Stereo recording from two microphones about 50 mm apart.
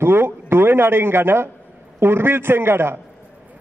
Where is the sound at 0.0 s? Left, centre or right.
Right.